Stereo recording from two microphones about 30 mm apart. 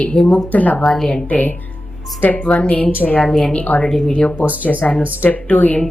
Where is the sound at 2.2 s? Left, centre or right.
Left.